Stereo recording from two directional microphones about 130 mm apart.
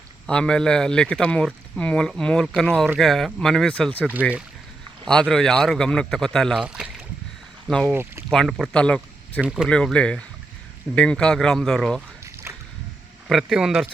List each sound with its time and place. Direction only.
0.3 s speech: 5° left (ahead or behind)
4.1 s speech: 10° right (ahead or behind)
5.0 s speech: 5° left (ahead or behind)
7.9 s speech: 20° right (ahead or behind)
8.3 s speech: centre (ahead or behind)
9.4 s speech: 5° right (ahead or behind)
9.6 s speech: 10° left (ahead or behind)
12.5 s splash: 20° right (ahead or behind)
13.2 s speech: 5° right (ahead or behind)